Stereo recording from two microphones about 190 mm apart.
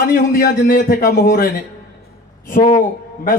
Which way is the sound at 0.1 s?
50° left (ahead or behind).